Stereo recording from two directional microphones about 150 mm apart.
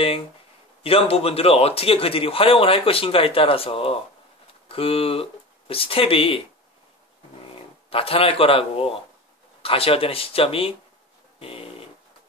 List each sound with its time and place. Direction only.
0.8 s a man's voice: 40° left (ahead or behind)
7.9 s a man's voice: 40° left (ahead or behind)
11.3 s a sound: 40° left (ahead or behind)